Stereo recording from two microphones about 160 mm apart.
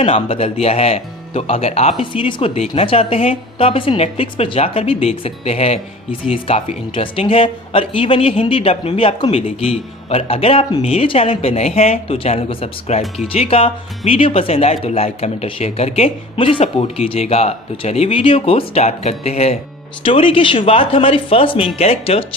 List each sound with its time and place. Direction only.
0.0 s speech: 35° left (ahead or behind)